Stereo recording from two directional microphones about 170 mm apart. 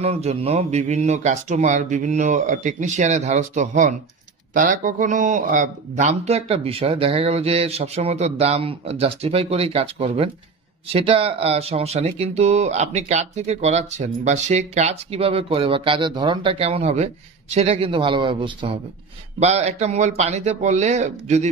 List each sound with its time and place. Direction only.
0.0 s speech: 40° right (ahead or behind)
19.4 s speech: 40° right (ahead or behind)